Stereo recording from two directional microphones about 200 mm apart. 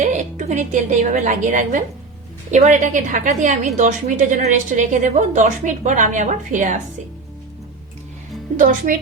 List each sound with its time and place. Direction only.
0.0 s a woman's voice: 40° right (ahead or behind)
8.5 s a woman's voice: 40° right (ahead or behind)